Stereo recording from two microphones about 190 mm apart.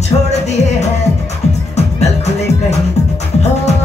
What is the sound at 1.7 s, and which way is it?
Music, 35° left (ahead or behind).